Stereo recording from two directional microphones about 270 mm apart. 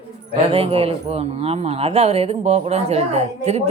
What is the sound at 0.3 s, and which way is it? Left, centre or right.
Speech, right.